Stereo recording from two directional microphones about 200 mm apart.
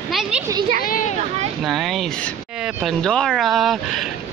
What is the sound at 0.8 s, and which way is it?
Speech, 40° left (ahead or behind).